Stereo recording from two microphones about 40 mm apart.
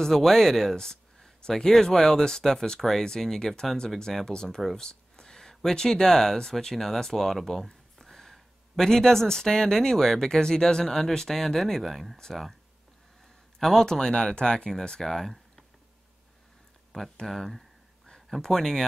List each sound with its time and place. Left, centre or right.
0.0 s speech: centre
4.3 s speech: centre
13.6 s speech: centre
14.9 s speech: centre
16.9 s speech: centre